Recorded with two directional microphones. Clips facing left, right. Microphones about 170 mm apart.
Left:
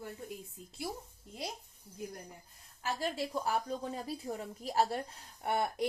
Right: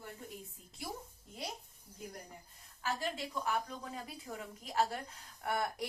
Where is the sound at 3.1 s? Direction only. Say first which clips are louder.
Left 3 dB; 35° left (ahead or behind).